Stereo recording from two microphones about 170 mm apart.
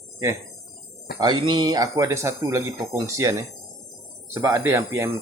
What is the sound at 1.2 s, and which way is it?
Speech, 25° right (ahead or behind).